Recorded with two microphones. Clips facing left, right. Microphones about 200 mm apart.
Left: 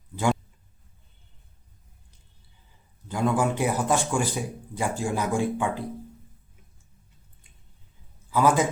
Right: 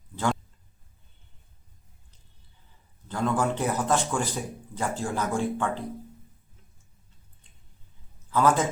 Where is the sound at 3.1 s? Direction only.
10° left (ahead or behind).